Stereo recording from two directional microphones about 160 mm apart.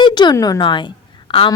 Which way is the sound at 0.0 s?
25° left (ahead or behind).